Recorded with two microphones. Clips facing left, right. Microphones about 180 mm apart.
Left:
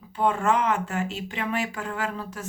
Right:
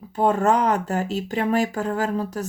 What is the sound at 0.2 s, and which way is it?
Speech, 40° right (ahead or behind).